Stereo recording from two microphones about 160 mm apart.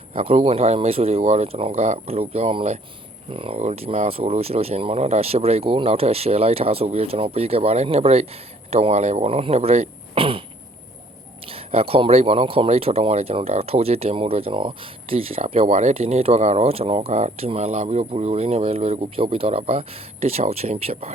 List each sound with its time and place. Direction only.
0.1 s speech: 35° right (ahead or behind)
11.4 s speech: 35° right (ahead or behind)